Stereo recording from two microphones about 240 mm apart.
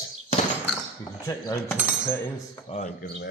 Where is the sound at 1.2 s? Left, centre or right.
Centre.